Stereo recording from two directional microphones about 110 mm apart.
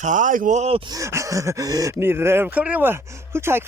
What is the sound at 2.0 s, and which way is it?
Speech, 20° right (ahead or behind).